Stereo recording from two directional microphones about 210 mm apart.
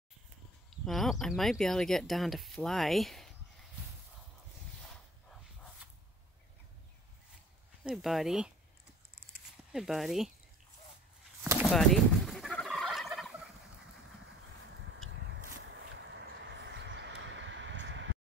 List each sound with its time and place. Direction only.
0.7 s speech: centre (ahead or behind)
4.8 s dog: centre (ahead or behind)
7.8 s speech: centre (ahead or behind)
9.7 s speech: centre (ahead or behind)
11.6 s fowl: centre (ahead or behind)
16.3 s a sound: 60° right (ahead or behind)